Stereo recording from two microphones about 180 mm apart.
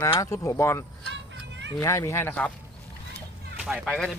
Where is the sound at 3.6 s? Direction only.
Centre (ahead or behind).